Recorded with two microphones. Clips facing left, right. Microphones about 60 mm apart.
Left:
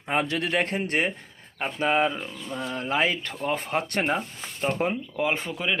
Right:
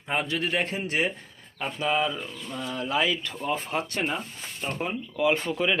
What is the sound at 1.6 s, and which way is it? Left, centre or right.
Speech, left.